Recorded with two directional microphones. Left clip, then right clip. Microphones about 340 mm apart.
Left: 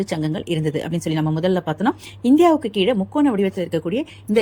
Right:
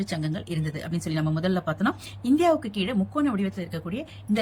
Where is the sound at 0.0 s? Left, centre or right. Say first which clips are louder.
Left 8 dB; centre.